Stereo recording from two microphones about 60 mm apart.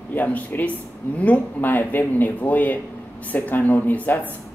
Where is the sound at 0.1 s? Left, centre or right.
Left.